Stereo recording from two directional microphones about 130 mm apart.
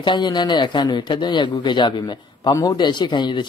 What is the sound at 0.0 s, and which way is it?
Speech, 35° left (ahead or behind).